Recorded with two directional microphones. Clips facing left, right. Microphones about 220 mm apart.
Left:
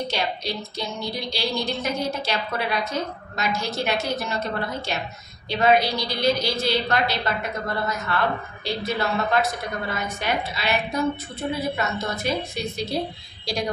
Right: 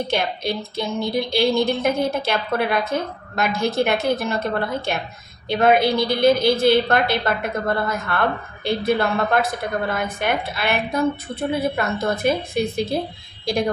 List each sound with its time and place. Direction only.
0.1 s a woman's voice: 55° right (ahead or behind)